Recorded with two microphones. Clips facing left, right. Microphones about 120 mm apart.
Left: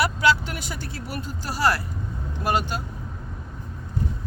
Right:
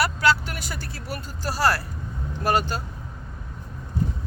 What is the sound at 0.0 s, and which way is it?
Speech, 20° left (ahead or behind).